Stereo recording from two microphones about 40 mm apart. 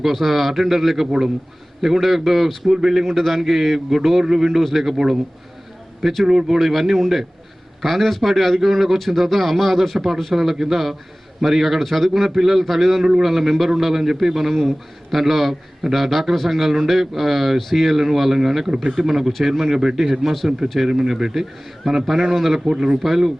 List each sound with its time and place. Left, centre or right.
0.0 s a man's voice: centre
6.6 s a man's voice: centre
19.0 s a man's voice: centre
20.2 s a man's voice: centre
21.8 s a man's voice: centre
22.6 s speech: centre
23.0 s speech: centre